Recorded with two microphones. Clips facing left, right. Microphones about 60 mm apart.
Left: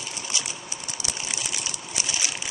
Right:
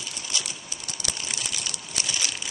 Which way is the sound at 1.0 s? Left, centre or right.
Centre.